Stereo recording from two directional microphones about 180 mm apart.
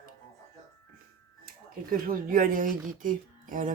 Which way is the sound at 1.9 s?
50° right (ahead or behind).